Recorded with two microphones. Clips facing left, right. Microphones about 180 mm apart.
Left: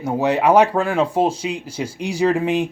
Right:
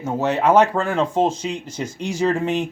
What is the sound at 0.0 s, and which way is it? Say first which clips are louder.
Speech: left 2 dB; 15° left (ahead or behind).